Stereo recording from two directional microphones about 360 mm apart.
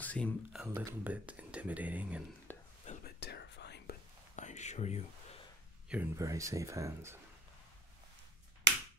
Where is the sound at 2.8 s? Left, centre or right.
Left.